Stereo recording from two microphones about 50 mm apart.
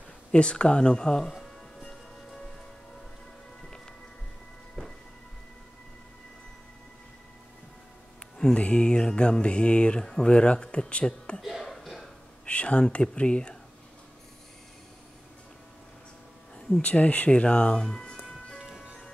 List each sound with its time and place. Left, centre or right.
0.3 s speech: left; by 1.9 s centre
4.8 s music: centre
8.5 s speech: left
11.4 s music: centre
12.4 s speech: left
16.8 s speech: left; by 18.6 s centre